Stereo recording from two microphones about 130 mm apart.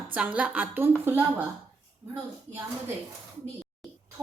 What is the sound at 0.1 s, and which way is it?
Speech, 10° right (ahead or behind).